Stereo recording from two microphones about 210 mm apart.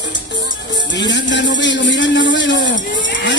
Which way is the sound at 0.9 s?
60° left (ahead or behind).